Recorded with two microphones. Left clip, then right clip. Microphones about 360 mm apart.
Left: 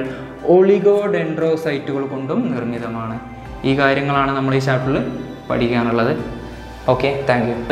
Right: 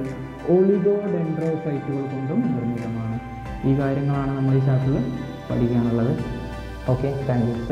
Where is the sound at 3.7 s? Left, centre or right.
Centre.